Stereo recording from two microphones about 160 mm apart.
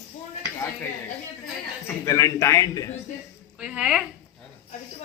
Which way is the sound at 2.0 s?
20° left (ahead or behind).